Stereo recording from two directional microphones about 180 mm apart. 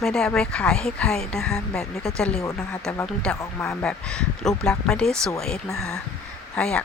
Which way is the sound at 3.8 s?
5° left (ahead or behind).